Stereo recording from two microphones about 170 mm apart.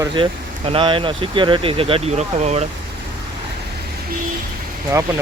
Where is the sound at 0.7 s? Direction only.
30° right (ahead or behind).